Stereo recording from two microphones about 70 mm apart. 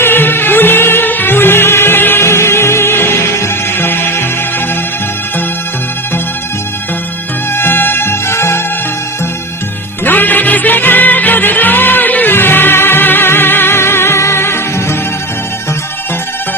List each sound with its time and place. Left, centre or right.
0.0 s music: left
7.5 s music: left
10.0 s music: left